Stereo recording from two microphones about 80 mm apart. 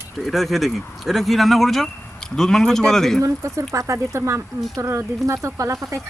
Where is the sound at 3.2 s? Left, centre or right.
Right.